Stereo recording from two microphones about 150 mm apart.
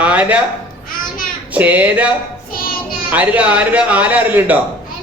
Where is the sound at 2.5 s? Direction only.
75° left (ahead or behind).